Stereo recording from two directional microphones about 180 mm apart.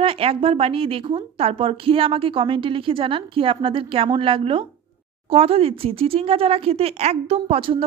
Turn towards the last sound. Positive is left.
turn(degrees=-30)  # may be behind; listen again after turning